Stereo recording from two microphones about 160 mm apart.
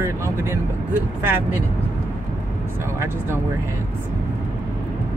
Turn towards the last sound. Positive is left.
turn(degrees=-15)  # may be behind; listen again after turning